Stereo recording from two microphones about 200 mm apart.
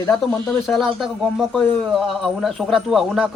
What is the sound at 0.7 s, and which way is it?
Speech, centre (ahead or behind).